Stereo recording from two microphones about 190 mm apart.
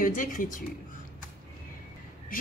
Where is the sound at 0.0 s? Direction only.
45° left (ahead or behind).